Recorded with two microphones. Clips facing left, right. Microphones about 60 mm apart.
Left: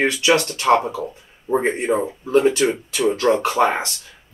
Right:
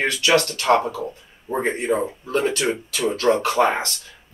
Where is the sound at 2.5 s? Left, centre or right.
Left.